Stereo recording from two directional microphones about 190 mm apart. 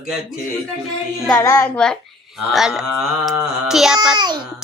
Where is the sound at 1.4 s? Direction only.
15° left (ahead or behind).